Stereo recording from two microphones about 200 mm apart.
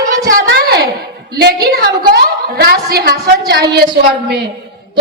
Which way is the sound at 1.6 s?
50° right (ahead or behind).